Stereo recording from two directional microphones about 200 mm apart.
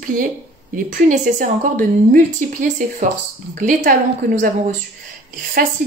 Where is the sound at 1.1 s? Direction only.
40° right (ahead or behind).